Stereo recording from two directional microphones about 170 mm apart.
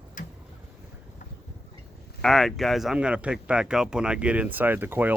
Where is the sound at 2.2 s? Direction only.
Centre (ahead or behind).